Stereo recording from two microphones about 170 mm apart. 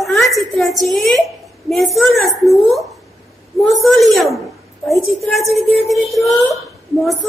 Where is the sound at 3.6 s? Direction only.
Centre (ahead or behind).